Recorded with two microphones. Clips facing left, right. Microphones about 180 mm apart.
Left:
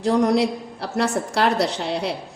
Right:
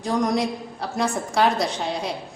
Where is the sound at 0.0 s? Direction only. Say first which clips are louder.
Left 4 dB; 70° left (ahead or behind).